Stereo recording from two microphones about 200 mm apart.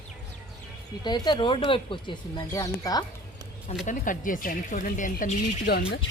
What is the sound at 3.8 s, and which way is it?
Speech, 40° left (ahead or behind).